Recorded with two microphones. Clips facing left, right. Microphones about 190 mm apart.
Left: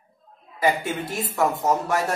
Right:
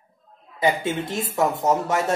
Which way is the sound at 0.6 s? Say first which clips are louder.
Right 1 dB; 20° right (ahead or behind).